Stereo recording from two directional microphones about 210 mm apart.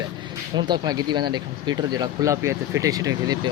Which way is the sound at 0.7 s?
20° right (ahead or behind).